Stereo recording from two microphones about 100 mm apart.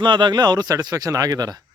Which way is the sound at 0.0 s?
50° right (ahead or behind).